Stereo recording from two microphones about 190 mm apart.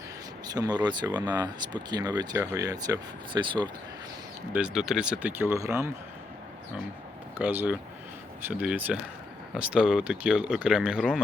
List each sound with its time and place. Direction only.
0.5 s speech: 20° right (ahead or behind)
4.5 s speech: 5° right (ahead or behind)
7.3 s speech: 10° right (ahead or behind)